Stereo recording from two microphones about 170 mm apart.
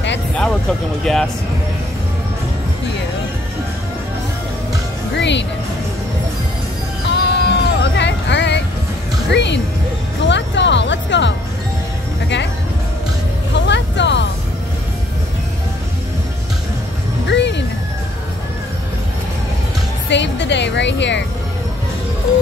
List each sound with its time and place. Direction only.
1.1 s speech: centre (ahead or behind)
5.1 s music: 90° left
7.1 s music: 90° left
9.3 s a woman's voice: 90° left
10.2 s music: 90° left
13.7 s a sound: 90° left
17.3 s music: 90° left
20.1 s a woman's voice: 90° left